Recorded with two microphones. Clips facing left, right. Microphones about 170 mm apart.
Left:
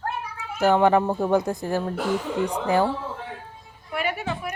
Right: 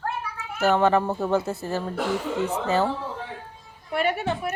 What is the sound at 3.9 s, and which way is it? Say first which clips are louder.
Speech: right 3 dB; 30° right (ahead or behind).